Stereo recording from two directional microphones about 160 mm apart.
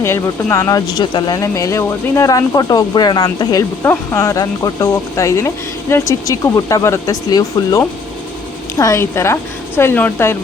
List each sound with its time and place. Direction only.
0.0 s a woman's voice: 15° left (ahead or behind)